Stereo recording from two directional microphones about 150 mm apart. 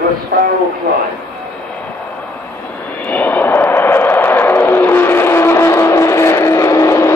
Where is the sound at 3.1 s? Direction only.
10° left (ahead or behind).